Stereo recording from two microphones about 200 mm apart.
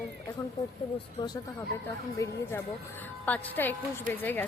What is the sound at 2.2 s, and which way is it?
Speech, 15° left (ahead or behind).